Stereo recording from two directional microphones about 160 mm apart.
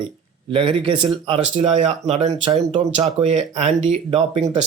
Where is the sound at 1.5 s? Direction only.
45° right (ahead or behind).